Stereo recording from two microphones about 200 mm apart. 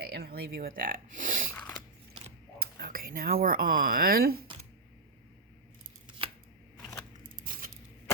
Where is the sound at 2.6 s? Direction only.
50° right (ahead or behind).